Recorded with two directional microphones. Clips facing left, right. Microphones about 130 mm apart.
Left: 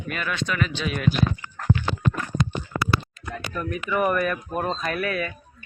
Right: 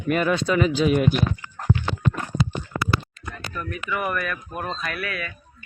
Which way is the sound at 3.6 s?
35° left (ahead or behind).